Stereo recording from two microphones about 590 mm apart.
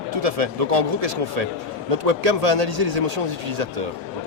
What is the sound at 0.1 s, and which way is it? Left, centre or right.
A man's voice, right.